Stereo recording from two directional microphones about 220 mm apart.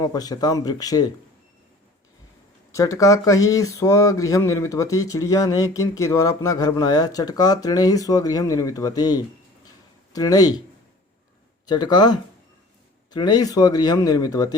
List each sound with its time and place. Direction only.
0.0 s speech: 15° left (ahead or behind)
2.7 s speech: 15° left (ahead or behind)
11.6 s speech: 20° left (ahead or behind)